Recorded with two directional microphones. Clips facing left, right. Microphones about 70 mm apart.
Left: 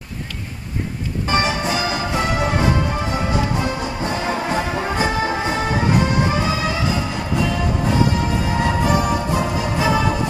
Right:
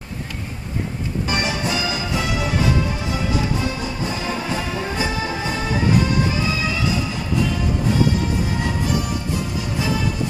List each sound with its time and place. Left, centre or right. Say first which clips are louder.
1.3 s music: left 4 dB; left
1.9 s music: left 3 dB; left
8.5 s music: left 4 dB; left